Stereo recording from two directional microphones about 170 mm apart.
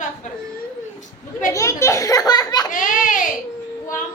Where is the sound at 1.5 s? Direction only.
15° left (ahead or behind).